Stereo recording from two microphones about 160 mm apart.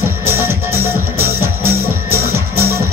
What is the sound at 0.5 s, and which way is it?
Music, 15° right (ahead or behind).